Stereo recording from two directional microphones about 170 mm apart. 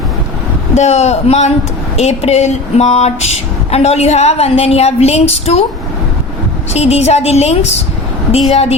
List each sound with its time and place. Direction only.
0.7 s speech: 40° left (ahead or behind)
6.7 s speech: 40° left (ahead or behind)